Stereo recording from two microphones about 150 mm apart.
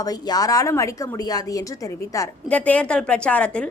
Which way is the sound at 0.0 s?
25° left (ahead or behind).